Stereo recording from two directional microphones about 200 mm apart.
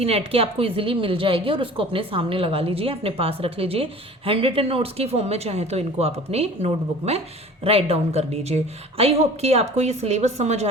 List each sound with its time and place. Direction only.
0.0 s a woman's voice: 30° right (ahead or behind)